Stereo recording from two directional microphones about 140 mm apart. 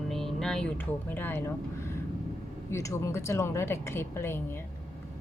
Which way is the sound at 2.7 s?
20° left (ahead or behind).